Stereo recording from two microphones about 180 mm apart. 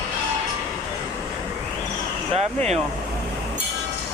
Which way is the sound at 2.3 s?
35° right (ahead or behind).